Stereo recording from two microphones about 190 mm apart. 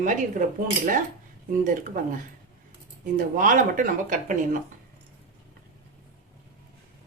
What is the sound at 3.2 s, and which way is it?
Speech, 45° right (ahead or behind).